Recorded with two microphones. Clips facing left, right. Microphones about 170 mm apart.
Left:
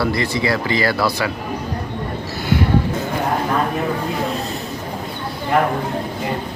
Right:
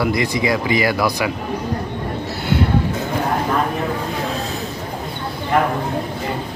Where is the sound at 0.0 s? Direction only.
15° right (ahead or behind).